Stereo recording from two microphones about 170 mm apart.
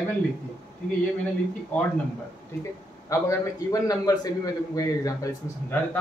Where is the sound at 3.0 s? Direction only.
20° left (ahead or behind).